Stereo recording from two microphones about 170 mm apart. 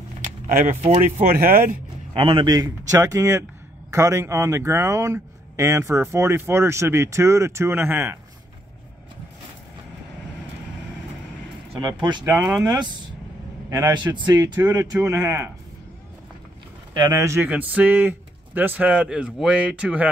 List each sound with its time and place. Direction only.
0.2 s keys jangling: 50° right (ahead or behind)
0.8 s speech: 35° right (ahead or behind); by 8.2 s 10° right (ahead or behind)
12.0 s speech: 25° right (ahead or behind)
12.3 s speech: 10° right (ahead or behind)
12.6 s speech: 25° right (ahead or behind)
16.9 s speech: 20° right (ahead or behind)